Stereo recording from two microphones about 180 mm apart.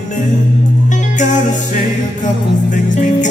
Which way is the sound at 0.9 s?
45° left (ahead or behind).